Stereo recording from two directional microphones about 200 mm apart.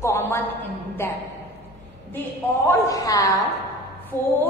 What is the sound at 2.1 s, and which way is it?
A woman's voice, 10° left (ahead or behind).